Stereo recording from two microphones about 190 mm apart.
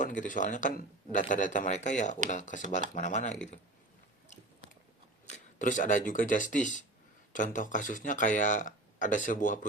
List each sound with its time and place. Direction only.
0.0 s speech: 40° left (ahead or behind)
5.2 s speech: 40° left (ahead or behind)